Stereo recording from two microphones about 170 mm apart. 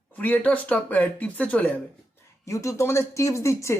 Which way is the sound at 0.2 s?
10° left (ahead or behind).